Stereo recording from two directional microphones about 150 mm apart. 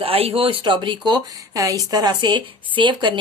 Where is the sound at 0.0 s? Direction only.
40° right (ahead or behind).